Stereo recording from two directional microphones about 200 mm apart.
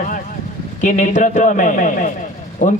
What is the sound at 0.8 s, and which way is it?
A man's voice, 40° left (ahead or behind).